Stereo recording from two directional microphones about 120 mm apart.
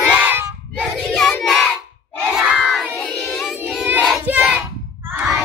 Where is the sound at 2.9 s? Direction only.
15° left (ahead or behind).